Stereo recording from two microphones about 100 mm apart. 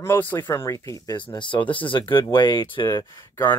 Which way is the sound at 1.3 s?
55° left (ahead or behind).